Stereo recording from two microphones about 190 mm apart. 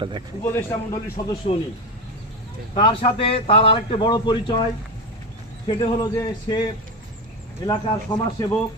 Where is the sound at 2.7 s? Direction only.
30° left (ahead or behind).